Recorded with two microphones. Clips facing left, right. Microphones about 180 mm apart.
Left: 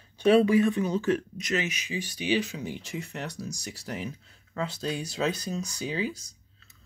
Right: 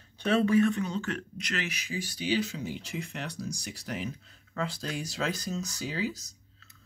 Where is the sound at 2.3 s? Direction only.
15° left (ahead or behind).